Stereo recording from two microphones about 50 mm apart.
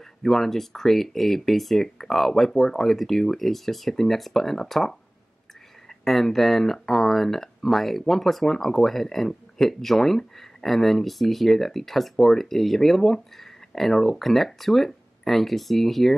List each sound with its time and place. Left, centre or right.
0.2 s speech: centre